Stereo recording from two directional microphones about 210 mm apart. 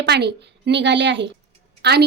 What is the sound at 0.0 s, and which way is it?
A woman's voice, 50° right (ahead or behind).